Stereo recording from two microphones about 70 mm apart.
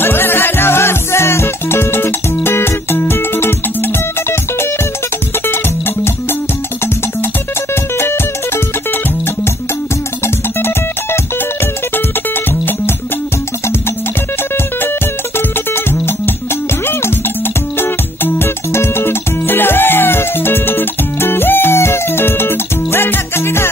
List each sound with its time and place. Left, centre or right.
0.0 s music: left
8.0 s music: left
10.2 s music: left
15.3 s music: left
17.7 s music: left